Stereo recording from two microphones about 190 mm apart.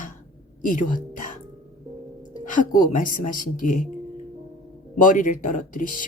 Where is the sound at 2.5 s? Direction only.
45° left (ahead or behind).